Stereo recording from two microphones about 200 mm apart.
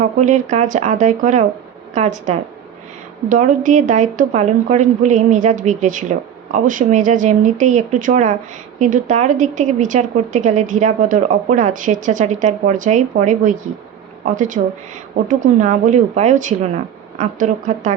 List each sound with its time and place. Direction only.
0.0 s a woman's voice: 40° right (ahead or behind)